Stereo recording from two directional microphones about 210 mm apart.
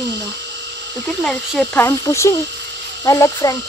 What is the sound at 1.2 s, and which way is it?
Speech, centre (ahead or behind).